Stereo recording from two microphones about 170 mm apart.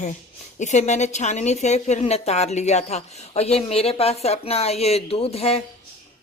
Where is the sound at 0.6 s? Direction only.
45° left (ahead or behind).